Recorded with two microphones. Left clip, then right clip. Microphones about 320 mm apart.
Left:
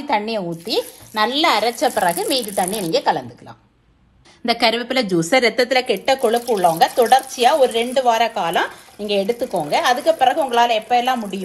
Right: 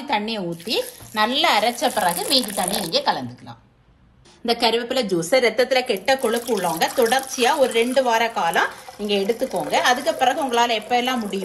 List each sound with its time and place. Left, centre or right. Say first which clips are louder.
0.1 s speech: left 3 dB; centre
4.5 s a woman's voice: left 2 dB; centre